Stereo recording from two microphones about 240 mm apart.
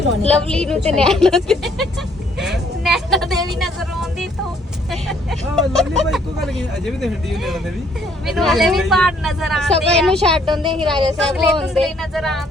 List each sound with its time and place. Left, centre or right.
0.3 s speech: centre
2.4 s vehicle: centre
4.9 s speech: centre